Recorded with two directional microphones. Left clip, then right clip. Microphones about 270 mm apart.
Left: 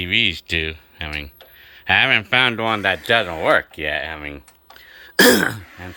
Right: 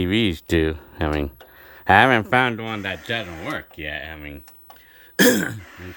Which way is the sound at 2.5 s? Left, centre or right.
Centre.